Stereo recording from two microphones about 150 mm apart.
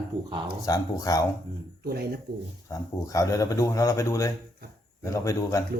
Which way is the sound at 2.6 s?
20° left (ahead or behind).